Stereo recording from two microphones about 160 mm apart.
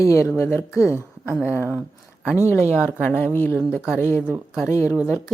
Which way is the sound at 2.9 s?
10° left (ahead or behind).